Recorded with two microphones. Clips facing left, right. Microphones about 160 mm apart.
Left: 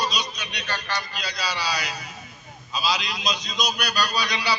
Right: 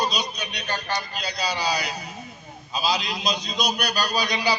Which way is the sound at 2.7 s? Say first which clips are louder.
Right 1 dB; 30° right (ahead or behind).